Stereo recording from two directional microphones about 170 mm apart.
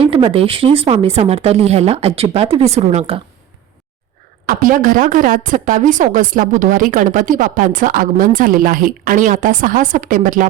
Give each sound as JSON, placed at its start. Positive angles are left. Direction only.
{"t": 0.0, "sound": "speech", "side_deg": -35}
{"t": 4.4, "sound": "a woman's voice", "side_deg": -55}